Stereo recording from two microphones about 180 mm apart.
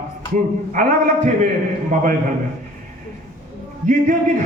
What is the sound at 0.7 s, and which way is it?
Speech, 45° right (ahead or behind).